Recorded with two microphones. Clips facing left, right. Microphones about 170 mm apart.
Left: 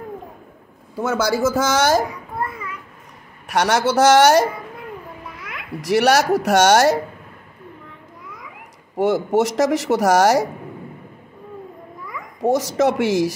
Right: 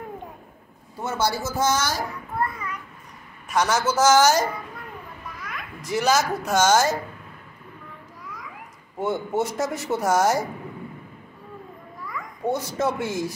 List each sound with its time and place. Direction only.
0.9 s speech: 90° left; by 2.0 s 65° left (ahead or behind)
3.4 s speech: 70° left (ahead or behind)
5.8 s speech: 75° left (ahead or behind)
8.9 s speech: 85° left
12.4 s speech: 90° left